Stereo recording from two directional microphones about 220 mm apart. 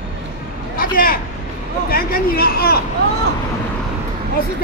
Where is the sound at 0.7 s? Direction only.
40° left (ahead or behind).